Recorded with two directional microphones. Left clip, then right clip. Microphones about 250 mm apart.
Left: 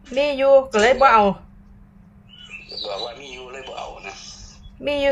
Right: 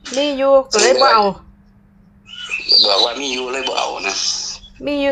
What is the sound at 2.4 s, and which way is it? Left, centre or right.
Bird, right.